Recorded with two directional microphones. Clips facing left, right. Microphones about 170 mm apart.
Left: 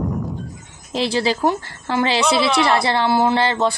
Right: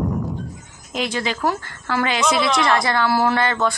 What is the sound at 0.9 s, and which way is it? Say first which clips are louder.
Speech: left 4 dB; 30° left (ahead or behind).